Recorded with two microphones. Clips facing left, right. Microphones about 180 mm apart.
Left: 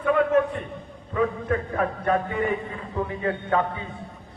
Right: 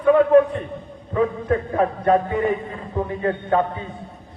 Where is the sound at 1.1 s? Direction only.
35° right (ahead or behind).